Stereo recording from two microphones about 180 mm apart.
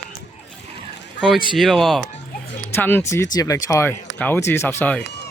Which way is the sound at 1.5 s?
Centre (ahead or behind).